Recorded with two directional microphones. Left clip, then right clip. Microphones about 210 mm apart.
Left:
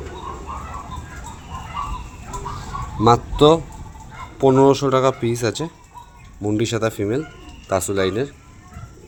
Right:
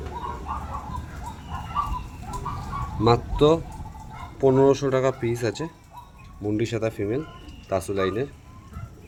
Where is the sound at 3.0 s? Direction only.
20° left (ahead or behind).